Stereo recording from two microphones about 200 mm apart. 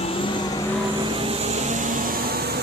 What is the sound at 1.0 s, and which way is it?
Vehicle, 25° right (ahead or behind).